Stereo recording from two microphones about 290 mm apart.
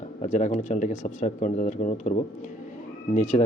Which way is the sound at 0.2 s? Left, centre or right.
Left.